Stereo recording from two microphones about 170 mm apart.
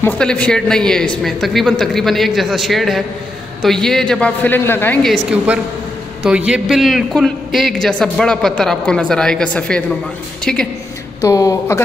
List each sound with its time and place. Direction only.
0.0 s a man's voice: 5° left (ahead or behind)
11.1 s speech: 20° left (ahead or behind)